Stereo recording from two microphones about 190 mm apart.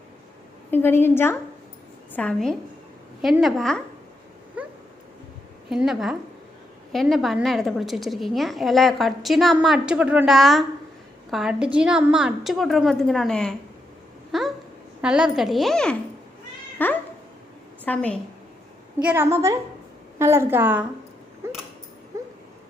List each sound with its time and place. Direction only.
0.7 s a woman's voice: 10° left (ahead or behind)
4.6 s dog: 5° right (ahead or behind)
5.6 s a woman's voice: centre (ahead or behind)
14.3 s a sound: centre (ahead or behind)
15.0 s a woman's voice: 5° right (ahead or behind)
18.9 s a woman's voice: 10° right (ahead or behind)
21.4 s a sound: 15° right (ahead or behind)
22.1 s dog: 15° right (ahead or behind)